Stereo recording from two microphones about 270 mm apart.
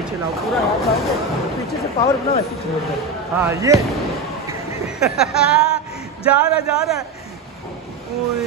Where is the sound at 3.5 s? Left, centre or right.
Centre.